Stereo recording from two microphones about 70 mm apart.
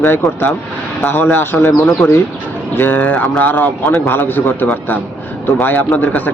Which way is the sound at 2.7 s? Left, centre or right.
Left.